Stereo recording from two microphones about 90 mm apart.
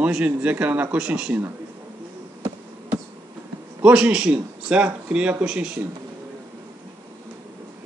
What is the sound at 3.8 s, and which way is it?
Speech, 10° right (ahead or behind).